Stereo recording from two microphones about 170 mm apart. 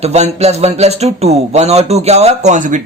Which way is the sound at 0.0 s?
40° right (ahead or behind).